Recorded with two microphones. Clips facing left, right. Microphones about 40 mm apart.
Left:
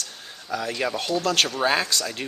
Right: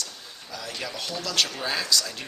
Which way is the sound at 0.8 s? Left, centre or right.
Left.